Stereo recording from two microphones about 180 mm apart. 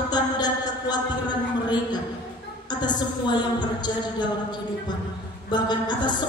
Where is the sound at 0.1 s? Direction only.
25° left (ahead or behind).